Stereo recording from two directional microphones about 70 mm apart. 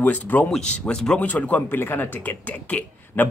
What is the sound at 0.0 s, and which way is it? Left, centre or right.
Speech, left.